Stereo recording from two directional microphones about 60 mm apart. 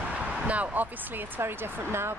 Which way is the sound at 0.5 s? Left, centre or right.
Right.